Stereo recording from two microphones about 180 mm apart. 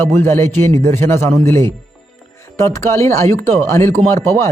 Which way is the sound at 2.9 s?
15° left (ahead or behind).